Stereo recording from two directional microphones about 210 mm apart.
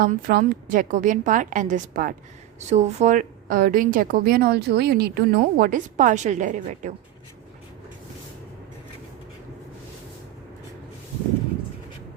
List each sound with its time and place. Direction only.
0.0 s a woman's voice: 45° right (ahead or behind)